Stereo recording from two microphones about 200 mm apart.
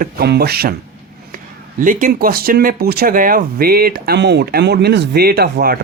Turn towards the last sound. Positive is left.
turn(degrees=-50)  # may be behind; listen again after turning